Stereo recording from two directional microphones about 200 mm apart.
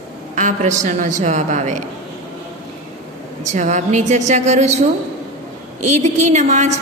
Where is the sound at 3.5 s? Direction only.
35° right (ahead or behind).